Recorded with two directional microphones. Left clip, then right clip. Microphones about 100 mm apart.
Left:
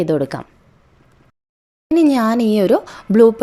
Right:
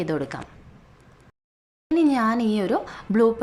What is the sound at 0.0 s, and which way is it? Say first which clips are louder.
Speech: left 9 dB; 35° left (ahead or behind).